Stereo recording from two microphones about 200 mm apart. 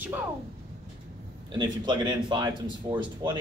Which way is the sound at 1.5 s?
20° right (ahead or behind).